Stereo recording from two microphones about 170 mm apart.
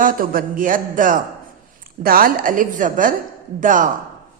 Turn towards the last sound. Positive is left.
turn(degrees=-50)  # may be behind; listen again after turning